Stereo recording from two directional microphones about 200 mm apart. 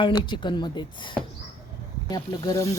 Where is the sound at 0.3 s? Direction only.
25° left (ahead or behind).